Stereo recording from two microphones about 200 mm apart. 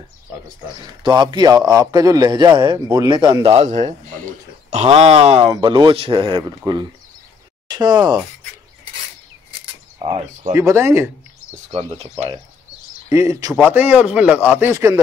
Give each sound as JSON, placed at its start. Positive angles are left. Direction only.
{"t": 1.0, "sound": "a man's voice", "side_deg": -20}
{"t": 9.9, "sound": "speech", "side_deg": -30}
{"t": 10.5, "sound": "speech", "side_deg": -15}
{"t": 11.5, "sound": "a man's voice", "side_deg": -30}
{"t": 13.1, "sound": "speech", "side_deg": -15}